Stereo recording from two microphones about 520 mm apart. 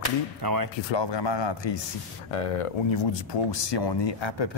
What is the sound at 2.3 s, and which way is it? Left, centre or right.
Speech, left.